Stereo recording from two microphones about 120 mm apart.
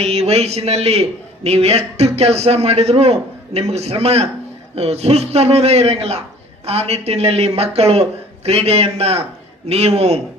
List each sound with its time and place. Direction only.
0.0 s a man's voice: 60° right (ahead or behind)